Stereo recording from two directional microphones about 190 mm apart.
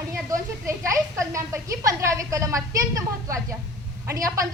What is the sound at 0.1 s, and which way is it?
A woman's voice, 15° right (ahead or behind).